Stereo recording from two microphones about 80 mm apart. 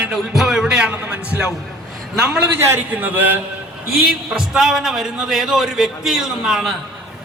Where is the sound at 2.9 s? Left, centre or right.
Right.